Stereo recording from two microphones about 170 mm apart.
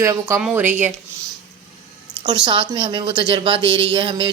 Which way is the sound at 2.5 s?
30° right (ahead or behind).